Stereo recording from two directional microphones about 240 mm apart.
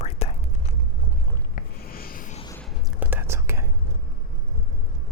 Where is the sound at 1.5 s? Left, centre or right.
Left.